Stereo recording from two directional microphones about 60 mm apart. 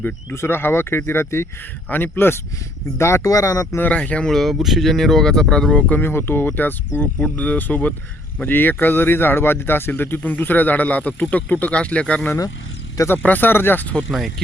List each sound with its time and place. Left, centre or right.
0.3 s speech: left
3.0 s speech: left
3.2 s speech: left
3.9 s speech: centre
4.3 s speech: centre
5.9 s speech: left
13.2 s speech: left
14.1 s speech: centre